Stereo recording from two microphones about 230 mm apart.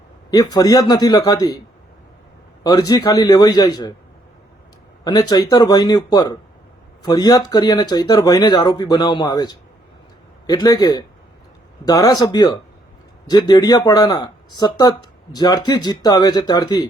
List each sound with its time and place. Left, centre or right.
0.3 s speech: centre
2.6 s speech: centre
5.0 s speech: centre